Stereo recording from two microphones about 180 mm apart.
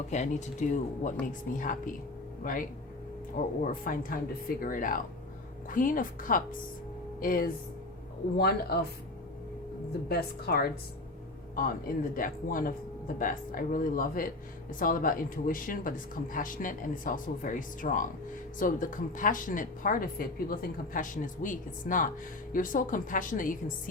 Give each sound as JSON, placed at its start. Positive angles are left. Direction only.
{"t": 0.1, "sound": "speech", "side_deg": 40}
{"t": 8.4, "sound": "a woman's voice", "side_deg": 60}
{"t": 10.1, "sound": "a woman's voice", "side_deg": 60}
{"t": 12.1, "sound": "speech", "side_deg": 50}